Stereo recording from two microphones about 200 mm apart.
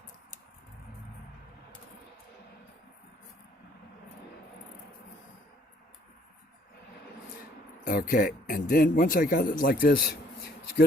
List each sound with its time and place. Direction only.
7.9 s speech: 45° left (ahead or behind)